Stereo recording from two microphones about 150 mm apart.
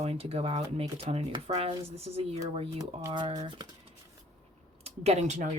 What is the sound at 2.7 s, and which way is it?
Speech, 30° right (ahead or behind).